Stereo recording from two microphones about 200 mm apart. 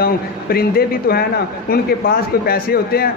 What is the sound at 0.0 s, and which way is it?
Speech, 50° left (ahead or behind).